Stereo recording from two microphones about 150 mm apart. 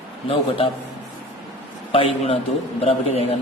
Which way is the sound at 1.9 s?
35° left (ahead or behind).